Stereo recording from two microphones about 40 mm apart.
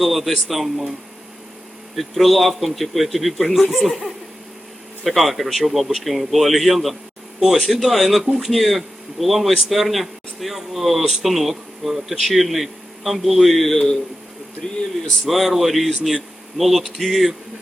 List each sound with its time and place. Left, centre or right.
0.0 s a man's voice: centre
2.0 s a man's voice: centre
14.6 s speech: centre
15.3 s a man's voice: centre